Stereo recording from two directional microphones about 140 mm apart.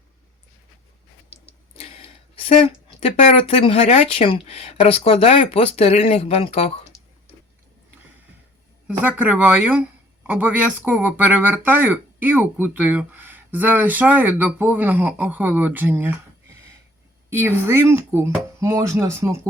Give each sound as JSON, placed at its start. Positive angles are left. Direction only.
{"t": 1.5, "sound": "speech", "side_deg": 45}
{"t": 8.9, "sound": "speech", "side_deg": -10}
{"t": 17.2, "sound": "a woman's voice", "side_deg": -20}